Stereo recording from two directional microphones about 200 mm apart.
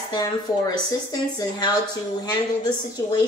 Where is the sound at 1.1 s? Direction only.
20° left (ahead or behind).